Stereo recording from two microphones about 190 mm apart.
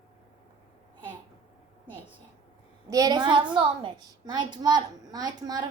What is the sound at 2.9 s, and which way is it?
A child's voice, 20° right (ahead or behind).